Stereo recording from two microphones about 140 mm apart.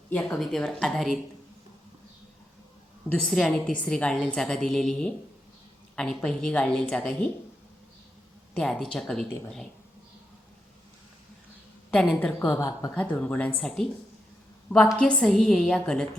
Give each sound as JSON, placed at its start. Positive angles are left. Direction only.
{"t": 0.1, "sound": "speech", "side_deg": 10}
{"t": 3.1, "sound": "a woman's voice", "side_deg": 5}
{"t": 8.5, "sound": "speech", "side_deg": 5}
{"t": 12.2, "sound": "a woman's voice", "side_deg": 10}
{"t": 12.5, "sound": "speech", "side_deg": 25}
{"t": 13.0, "sound": "a woman's voice", "side_deg": 10}